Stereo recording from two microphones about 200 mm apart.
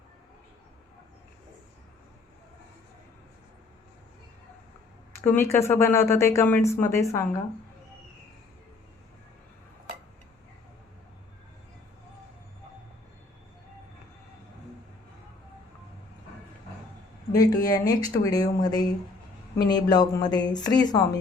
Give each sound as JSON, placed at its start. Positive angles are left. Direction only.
{"t": 5.2, "sound": "speech", "side_deg": 10}
{"t": 17.3, "sound": "speech", "side_deg": 20}